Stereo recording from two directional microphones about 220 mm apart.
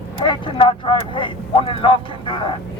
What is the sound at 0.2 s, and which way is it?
Speech, 20° left (ahead or behind).